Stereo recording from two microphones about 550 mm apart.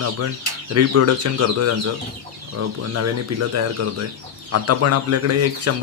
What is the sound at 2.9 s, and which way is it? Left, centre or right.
Speech, right.